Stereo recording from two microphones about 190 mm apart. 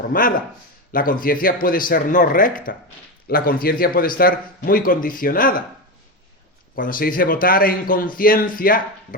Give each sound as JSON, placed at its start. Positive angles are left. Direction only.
{"t": 0.1, "sound": "a man's voice", "side_deg": 45}
{"t": 6.7, "sound": "a man's voice", "side_deg": 50}